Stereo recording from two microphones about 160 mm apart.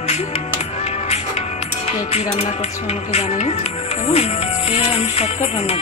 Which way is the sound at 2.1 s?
40° left (ahead or behind).